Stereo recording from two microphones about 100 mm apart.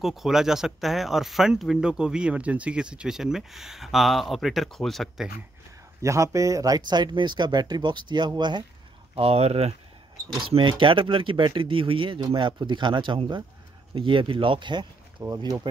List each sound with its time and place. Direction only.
0.0 s speech: centre (ahead or behind)
6.0 s speech: 30° right (ahead or behind); by 8.6 s 50° right (ahead or behind)
9.1 s speech: 85° right
10.4 s speech: 55° right (ahead or behind)
15.3 s speech: 40° right (ahead or behind)